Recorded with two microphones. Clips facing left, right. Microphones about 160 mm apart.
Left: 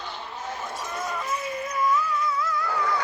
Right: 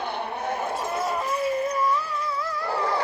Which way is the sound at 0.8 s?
35° right (ahead or behind).